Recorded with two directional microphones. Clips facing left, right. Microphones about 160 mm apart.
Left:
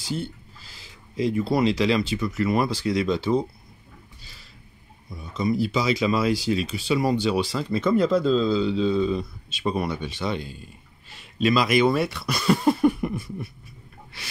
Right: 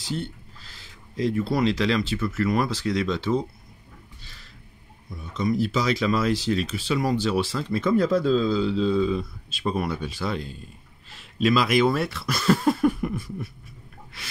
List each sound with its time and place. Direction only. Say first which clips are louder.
0.0 s a sound: left 1 dB; centre (ahead or behind)
1.4 s speech: left 2 dB; 5° left (ahead or behind)
2.1 s speech: even; 15° left (ahead or behind)
2.4 s speech: left 1 dB; 5° left (ahead or behind)
4.2 s a sound: even; centre (ahead or behind)
5.3 s speech: even; centre (ahead or behind)
12.5 s cough: left 1 dB; centre (ahead or behind)